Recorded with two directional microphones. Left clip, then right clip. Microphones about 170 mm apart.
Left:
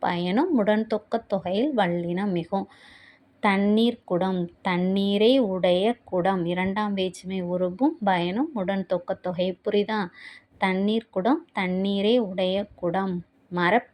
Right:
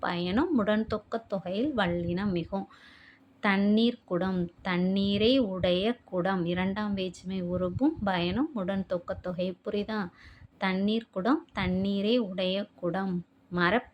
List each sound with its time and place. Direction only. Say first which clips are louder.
0.0 s a woman's voice: left 5 dB; 20° left (ahead or behind)